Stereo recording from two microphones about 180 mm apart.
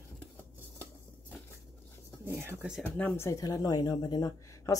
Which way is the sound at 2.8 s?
10° left (ahead or behind).